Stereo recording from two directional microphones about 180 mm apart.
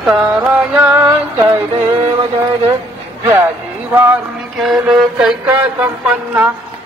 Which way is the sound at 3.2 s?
15° right (ahead or behind).